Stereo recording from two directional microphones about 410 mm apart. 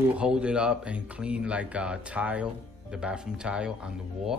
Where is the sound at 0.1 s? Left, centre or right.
Centre.